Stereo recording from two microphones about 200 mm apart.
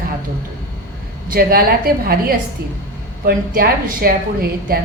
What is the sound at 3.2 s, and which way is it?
A woman's voice, 50° right (ahead or behind).